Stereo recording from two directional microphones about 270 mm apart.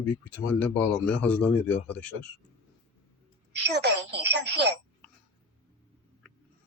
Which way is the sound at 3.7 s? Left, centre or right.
Right.